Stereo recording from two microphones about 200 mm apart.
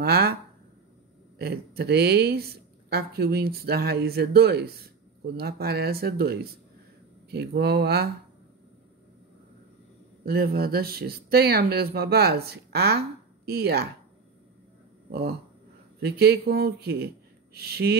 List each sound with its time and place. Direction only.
0.0 s speech: 50° right (ahead or behind)
1.4 s speech: 50° right (ahead or behind)
10.2 s speech: 50° right (ahead or behind)
15.0 s speech: 50° right (ahead or behind)